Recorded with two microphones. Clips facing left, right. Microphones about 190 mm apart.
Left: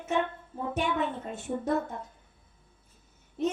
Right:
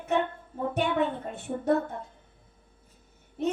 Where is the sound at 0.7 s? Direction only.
60° right (ahead or behind).